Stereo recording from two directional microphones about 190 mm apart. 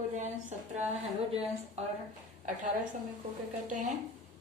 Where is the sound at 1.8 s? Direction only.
35° right (ahead or behind).